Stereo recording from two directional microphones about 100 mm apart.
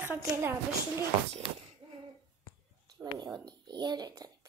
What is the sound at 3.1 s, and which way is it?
Speech, 45° right (ahead or behind).